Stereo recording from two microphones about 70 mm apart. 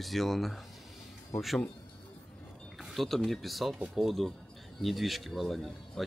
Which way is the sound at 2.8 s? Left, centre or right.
Centre.